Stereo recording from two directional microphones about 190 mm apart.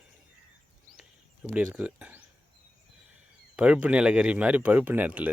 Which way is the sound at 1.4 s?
5° right (ahead or behind).